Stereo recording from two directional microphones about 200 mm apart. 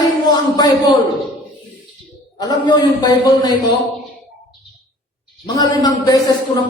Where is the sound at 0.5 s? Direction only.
20° left (ahead or behind).